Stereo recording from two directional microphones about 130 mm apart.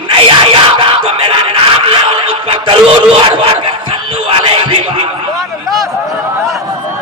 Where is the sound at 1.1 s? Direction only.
45° right (ahead or behind).